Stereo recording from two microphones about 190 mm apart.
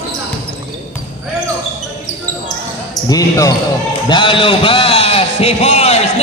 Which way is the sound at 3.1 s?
20° left (ahead or behind).